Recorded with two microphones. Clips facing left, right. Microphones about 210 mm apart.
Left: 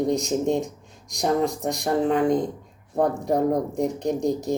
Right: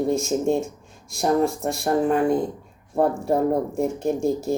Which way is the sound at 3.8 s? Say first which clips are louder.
Right 1 dB; 20° left (ahead or behind).